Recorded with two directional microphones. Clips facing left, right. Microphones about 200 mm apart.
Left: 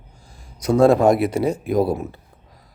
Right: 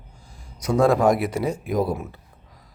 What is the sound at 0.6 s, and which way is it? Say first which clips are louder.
Speech: left 4 dB; 25° left (ahead or behind).